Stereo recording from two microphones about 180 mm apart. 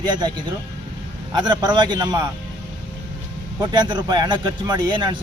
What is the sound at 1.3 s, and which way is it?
Speech, 25° right (ahead or behind).